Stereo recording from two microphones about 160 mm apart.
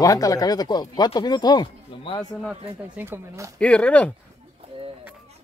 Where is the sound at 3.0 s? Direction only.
15° right (ahead or behind).